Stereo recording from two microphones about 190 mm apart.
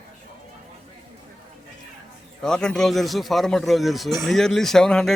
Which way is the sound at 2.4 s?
5° left (ahead or behind).